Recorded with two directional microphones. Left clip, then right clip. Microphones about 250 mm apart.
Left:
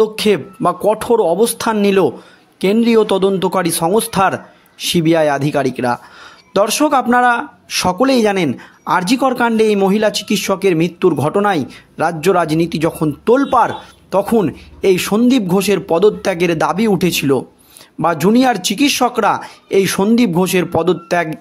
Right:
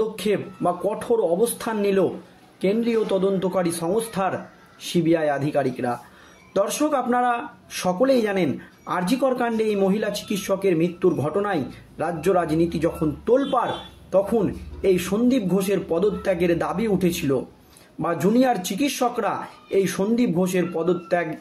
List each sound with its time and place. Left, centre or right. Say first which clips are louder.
0.2 s speech: left 9 dB; left